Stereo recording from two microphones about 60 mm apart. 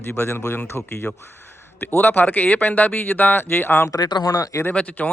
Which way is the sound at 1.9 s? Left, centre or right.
Left.